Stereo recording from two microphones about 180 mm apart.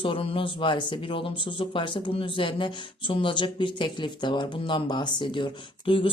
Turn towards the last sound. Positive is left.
turn(degrees=30)  # may be behind; listen again after turning